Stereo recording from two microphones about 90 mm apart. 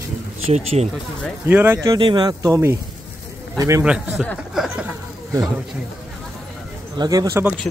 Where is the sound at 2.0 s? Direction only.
65° right (ahead or behind).